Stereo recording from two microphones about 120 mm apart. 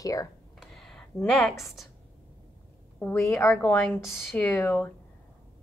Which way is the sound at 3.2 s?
25° left (ahead or behind).